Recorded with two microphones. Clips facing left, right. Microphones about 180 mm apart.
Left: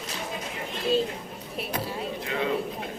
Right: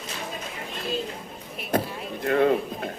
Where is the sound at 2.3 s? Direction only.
55° right (ahead or behind).